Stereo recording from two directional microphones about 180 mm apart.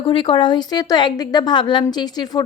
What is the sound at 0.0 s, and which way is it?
A woman's voice, 30° left (ahead or behind).